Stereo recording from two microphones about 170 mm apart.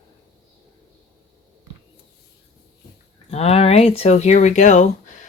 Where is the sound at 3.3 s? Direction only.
40° left (ahead or behind).